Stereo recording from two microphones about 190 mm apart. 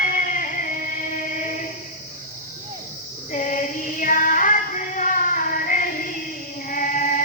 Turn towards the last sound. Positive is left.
turn(degrees=45)  # may be behind; listen again after turning